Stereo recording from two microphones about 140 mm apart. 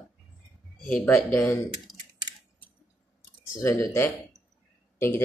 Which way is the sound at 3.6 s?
20° left (ahead or behind).